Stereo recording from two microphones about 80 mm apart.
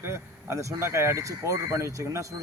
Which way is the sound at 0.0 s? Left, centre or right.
Right.